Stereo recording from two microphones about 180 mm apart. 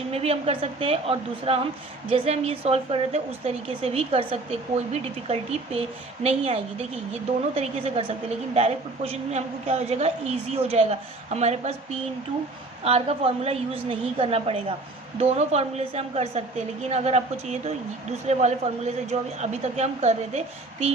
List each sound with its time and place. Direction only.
0.1 s a woman's voice: 35° right (ahead or behind)
12.8 s a woman's voice: 35° right (ahead or behind)